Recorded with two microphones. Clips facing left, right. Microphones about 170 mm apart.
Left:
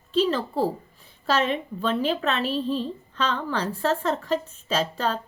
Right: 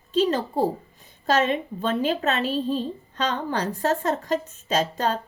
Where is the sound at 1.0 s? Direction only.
45° right (ahead or behind).